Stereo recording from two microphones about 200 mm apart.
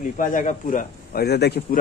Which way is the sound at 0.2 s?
40° left (ahead or behind).